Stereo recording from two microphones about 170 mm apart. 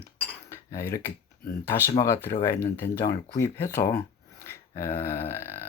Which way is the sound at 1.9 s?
20° left (ahead or behind).